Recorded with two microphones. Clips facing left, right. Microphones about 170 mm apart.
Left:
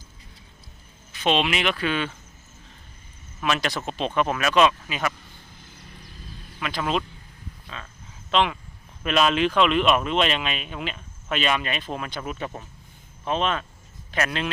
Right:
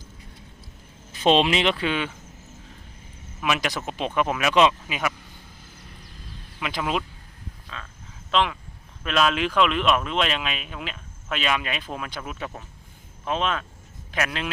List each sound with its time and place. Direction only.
1.2 s speech: 30° right (ahead or behind); by 2.1 s 15° right (ahead or behind)
3.4 s speech: 10° right (ahead or behind)
6.6 s speech: 15° right (ahead or behind)
7.7 s speech: centre (ahead or behind)